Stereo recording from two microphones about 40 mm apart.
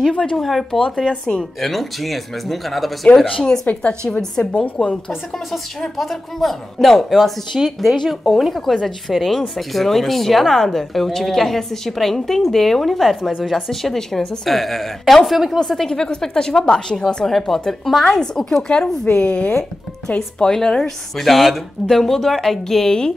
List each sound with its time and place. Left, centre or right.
0.4 s a woman's voice: centre
1.0 s speech: centre
1.6 s a woman's voice: centre
3.3 s speech: left
4.8 s a woman's voice: centre
13.7 s a woman's voice: centre
15.6 s a woman's voice: centre
15.9 s a woman's voice: centre
20.2 s a woman's voice: centre
21.2 s a woman's voice: centre